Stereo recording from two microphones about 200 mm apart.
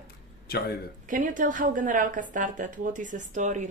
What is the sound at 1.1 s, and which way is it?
Speech, 40° right (ahead or behind).